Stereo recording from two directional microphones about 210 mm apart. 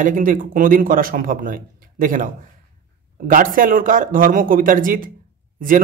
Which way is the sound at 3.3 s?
40° right (ahead or behind).